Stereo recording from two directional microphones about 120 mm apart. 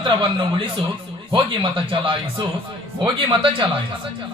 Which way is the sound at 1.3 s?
45° right (ahead or behind).